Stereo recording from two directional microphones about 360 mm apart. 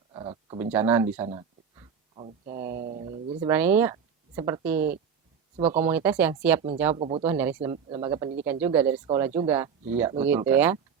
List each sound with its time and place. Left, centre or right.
0.1 s speech: centre
7.0 s speech: centre
7.3 s speech: centre